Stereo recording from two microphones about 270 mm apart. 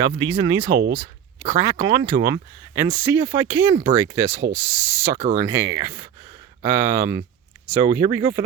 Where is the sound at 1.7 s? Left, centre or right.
Centre.